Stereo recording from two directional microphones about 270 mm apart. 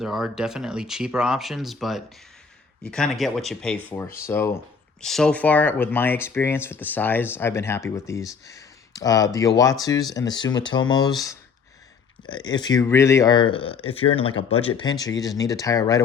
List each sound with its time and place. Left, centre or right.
0.0 s speech: centre